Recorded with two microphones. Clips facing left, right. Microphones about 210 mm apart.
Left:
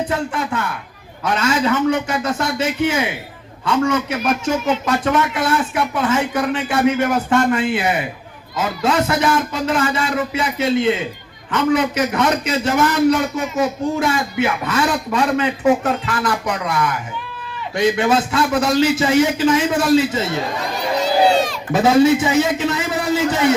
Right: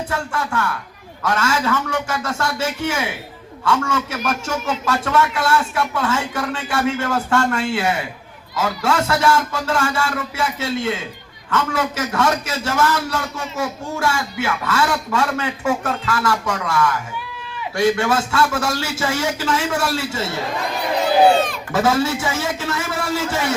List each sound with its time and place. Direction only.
0.0 s a man's voice: 20° left (ahead or behind)
21.0 s run: 55° right (ahead or behind)
21.7 s a man's voice: 20° left (ahead or behind)